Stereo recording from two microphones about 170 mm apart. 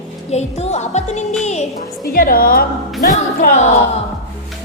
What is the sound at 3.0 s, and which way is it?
Music, 50° left (ahead or behind).